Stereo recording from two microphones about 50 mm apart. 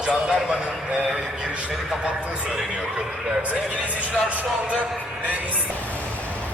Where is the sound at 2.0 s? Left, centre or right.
Centre.